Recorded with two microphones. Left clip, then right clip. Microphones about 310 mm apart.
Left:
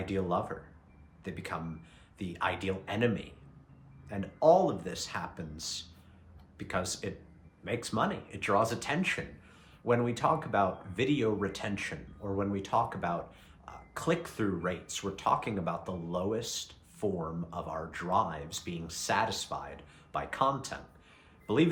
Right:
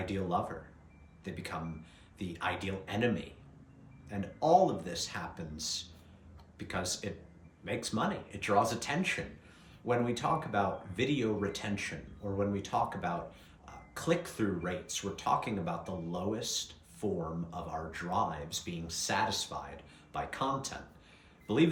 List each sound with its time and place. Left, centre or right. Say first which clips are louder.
0.0 s speech: left 2 dB; centre
13.7 s a sound: left 1 dB; centre
14.3 s speech: left 2 dB; centre